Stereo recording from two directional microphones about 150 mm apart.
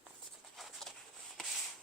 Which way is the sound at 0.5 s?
Centre (ahead or behind).